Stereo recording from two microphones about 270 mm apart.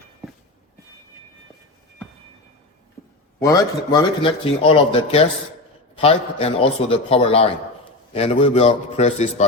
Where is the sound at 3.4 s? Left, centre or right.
Centre.